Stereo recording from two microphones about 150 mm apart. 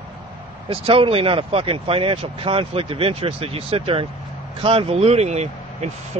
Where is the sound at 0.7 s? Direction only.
40° right (ahead or behind).